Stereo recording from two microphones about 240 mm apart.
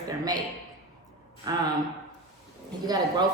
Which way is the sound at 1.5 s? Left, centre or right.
Centre.